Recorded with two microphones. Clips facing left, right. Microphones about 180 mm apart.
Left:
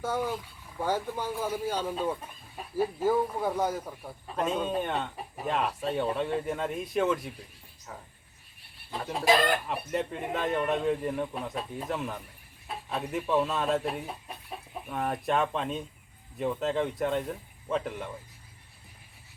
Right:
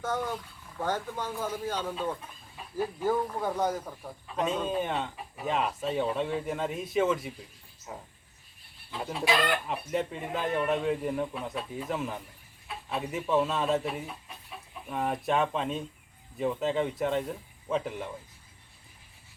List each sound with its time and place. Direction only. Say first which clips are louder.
0.0 s a man's voice: left 1 dB; 10° left (ahead or behind)
7.9 s speech: right 2 dB; 15° right (ahead or behind)
9.2 s speech: left 4 dB; 40° left (ahead or behind)
9.6 s a man's voice: even; centre (ahead or behind)